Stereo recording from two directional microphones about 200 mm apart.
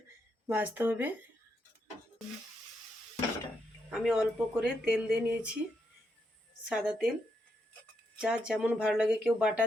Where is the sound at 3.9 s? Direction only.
5° right (ahead or behind).